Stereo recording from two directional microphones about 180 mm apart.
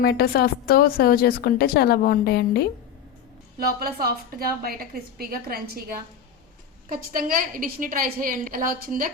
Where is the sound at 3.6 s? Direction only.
55° right (ahead or behind).